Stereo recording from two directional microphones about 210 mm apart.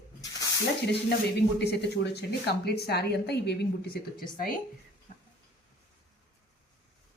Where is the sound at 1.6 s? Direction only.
55° left (ahead or behind).